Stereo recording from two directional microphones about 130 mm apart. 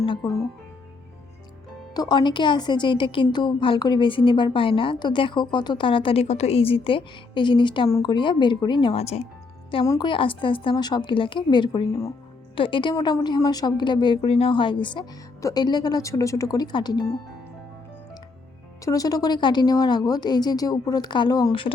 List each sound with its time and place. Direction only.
0.0 s speech: 40° left (ahead or behind)
1.9 s a woman's voice: 30° left (ahead or behind); by 9.2 s 55° left (ahead or behind)
9.8 s a woman's voice: 25° left (ahead or behind)
10.1 s a woman's voice: 40° left (ahead or behind)
18.9 s a woman's voice: 30° left (ahead or behind)